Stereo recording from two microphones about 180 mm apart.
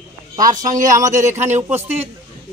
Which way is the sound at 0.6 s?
45° right (ahead or behind).